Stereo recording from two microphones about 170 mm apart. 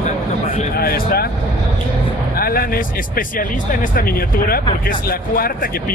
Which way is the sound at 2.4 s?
60° left (ahead or behind).